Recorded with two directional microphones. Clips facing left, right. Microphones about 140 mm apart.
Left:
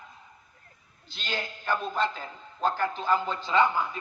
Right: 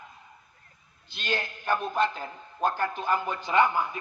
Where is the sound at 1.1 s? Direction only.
15° right (ahead or behind).